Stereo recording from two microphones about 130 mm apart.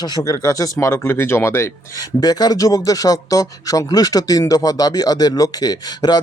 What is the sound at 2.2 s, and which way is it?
Speech, 30° left (ahead or behind).